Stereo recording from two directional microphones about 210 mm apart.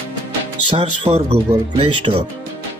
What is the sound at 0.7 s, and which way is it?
Speech, 25° right (ahead or behind).